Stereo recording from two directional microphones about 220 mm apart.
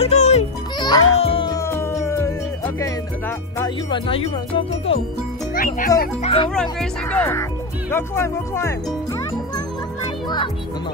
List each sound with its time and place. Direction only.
0.0 s music: 30° left (ahead or behind)
0.7 s music: 20° left (ahead or behind)
3.5 s speech: 20° left (ahead or behind)
5.5 s a child's voice: 40° left (ahead or behind)
6.5 s speech: centre (ahead or behind)